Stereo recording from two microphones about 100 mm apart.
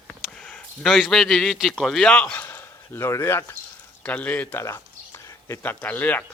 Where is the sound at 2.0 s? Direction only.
10° left (ahead or behind); by 3.4 s 25° left (ahead or behind).